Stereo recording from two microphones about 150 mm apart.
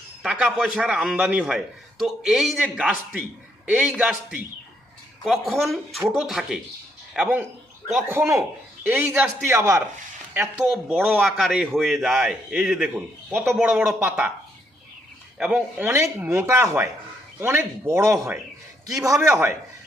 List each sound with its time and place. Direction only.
0.2 s a man's voice: 5° right (ahead or behind)
10.7 s speech: 5° right (ahead or behind)
11.2 s a man's voice: centre (ahead or behind)
15.4 s speech: 5° right (ahead or behind)
19.2 s speech: 15° right (ahead or behind)